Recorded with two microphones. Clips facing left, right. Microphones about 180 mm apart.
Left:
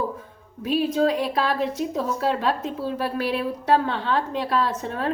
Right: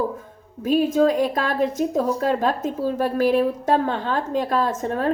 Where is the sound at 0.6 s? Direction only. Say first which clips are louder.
Right 3 dB; 45° right (ahead or behind).